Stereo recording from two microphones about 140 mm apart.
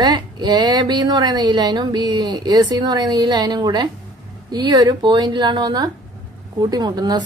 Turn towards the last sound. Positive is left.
turn(degrees=-30)  # may be behind; listen again after turning